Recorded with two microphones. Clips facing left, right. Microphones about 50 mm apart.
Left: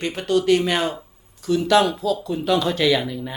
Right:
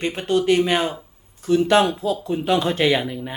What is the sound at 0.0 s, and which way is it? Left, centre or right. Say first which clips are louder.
Speech: even; right.